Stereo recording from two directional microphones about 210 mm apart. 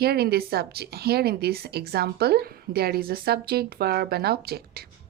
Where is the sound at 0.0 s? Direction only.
50° right (ahead or behind).